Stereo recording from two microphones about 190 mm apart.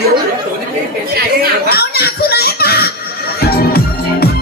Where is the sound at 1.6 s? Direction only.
55° left (ahead or behind).